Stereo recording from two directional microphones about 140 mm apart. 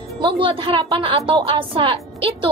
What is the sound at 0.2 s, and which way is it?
A woman's voice, 40° right (ahead or behind).